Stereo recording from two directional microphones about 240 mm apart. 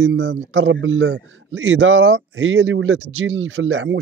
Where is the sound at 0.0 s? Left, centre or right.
Right.